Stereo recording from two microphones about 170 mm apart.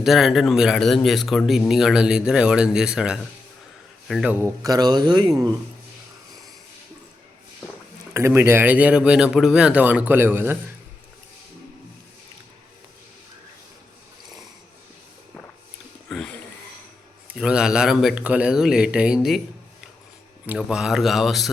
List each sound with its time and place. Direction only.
0.0 s speech: centre (ahead or behind); by 5.5 s 20° right (ahead or behind)
8.1 s speech: 15° right (ahead or behind)
16.0 s a sound: centre (ahead or behind)
17.2 s speech: 5° right (ahead or behind)
20.5 s speech: 5° right (ahead or behind)